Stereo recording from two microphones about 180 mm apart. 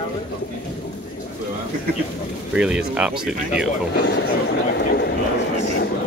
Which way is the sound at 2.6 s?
5° right (ahead or behind).